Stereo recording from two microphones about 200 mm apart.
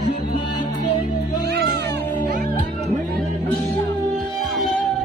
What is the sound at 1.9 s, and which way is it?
Music, 10° left (ahead or behind).